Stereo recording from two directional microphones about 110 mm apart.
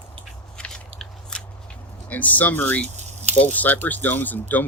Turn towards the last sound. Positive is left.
turn(degrees=15)  # may be behind; listen again after turning